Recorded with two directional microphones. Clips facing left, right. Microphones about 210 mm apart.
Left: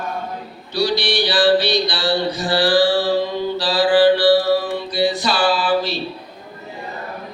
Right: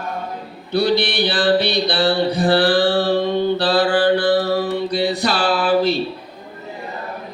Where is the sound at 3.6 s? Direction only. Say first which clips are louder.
Left 1 dB; 60° right (ahead or behind).